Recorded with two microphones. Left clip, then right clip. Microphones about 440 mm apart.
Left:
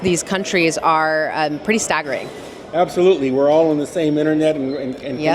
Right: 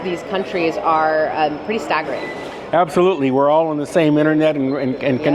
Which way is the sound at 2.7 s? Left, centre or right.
Right.